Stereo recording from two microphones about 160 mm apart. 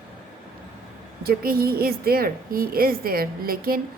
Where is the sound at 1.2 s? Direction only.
75° right (ahead or behind).